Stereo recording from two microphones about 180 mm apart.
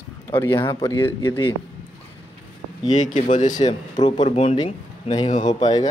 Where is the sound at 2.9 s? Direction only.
45° left (ahead or behind).